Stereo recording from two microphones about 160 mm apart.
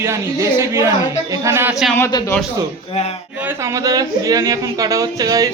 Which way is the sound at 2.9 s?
40° left (ahead or behind).